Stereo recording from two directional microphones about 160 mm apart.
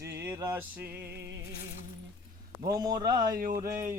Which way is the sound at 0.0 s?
15° right (ahead or behind).